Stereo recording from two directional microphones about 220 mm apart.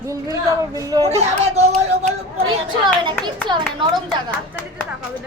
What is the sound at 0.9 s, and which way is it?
Speech, 20° right (ahead or behind).